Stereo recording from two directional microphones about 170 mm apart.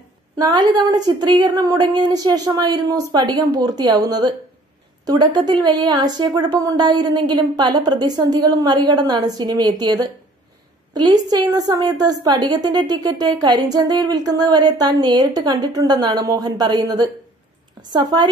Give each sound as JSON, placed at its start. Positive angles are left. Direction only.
{"t": 0.4, "sound": "a woman's voice", "side_deg": -25}